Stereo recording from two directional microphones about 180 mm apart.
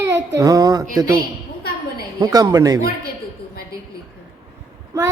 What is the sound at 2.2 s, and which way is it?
Speech, 20° right (ahead or behind).